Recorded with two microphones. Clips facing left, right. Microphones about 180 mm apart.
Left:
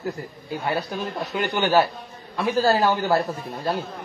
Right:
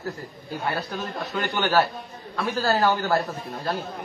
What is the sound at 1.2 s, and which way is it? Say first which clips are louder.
Speech: left 2 dB; 20° left (ahead or behind).